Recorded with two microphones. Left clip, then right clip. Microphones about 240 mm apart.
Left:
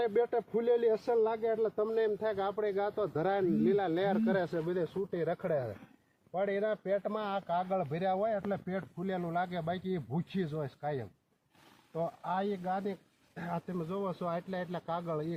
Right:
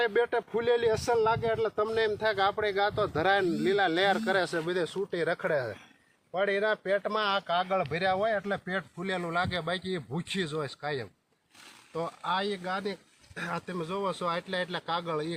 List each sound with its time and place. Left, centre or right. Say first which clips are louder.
0.0 s speech: right 3 dB; right